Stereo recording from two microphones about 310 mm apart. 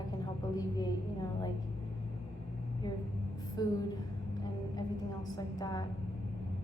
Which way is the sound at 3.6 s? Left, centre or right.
Centre.